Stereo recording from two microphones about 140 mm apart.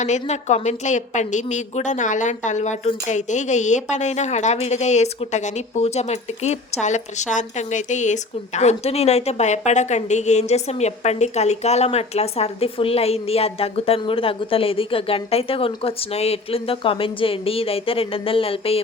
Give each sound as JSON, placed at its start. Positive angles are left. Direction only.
{"t": 0.0, "sound": "a woman's voice", "side_deg": 55}